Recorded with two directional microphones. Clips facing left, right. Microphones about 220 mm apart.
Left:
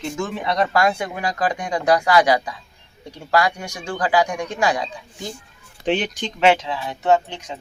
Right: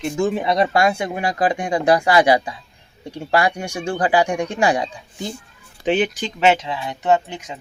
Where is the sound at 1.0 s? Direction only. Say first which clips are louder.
Right 3 dB; 25° right (ahead or behind).